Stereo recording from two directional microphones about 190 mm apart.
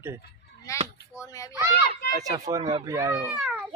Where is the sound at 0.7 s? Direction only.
15° left (ahead or behind).